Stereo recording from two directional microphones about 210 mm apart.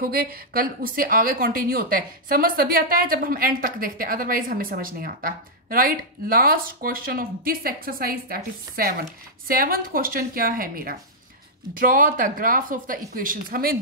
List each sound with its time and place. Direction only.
0.0 s a woman's voice: 45° right (ahead or behind)